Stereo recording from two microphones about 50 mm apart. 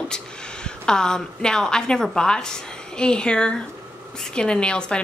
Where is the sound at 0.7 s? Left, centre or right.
Centre.